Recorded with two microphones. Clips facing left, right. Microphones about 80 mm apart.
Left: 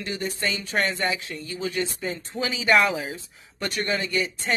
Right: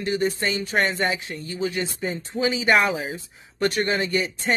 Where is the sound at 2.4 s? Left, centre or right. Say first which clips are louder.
Right 1 dB; right.